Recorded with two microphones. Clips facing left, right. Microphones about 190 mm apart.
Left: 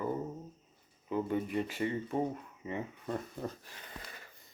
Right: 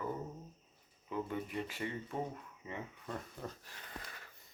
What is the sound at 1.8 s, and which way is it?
Speech, 10° left (ahead or behind).